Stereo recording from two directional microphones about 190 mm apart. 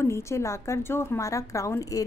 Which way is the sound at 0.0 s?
15° left (ahead or behind).